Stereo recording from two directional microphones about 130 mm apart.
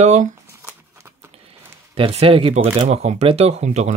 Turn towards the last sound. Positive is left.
turn(degrees=-60)  # may be behind; listen again after turning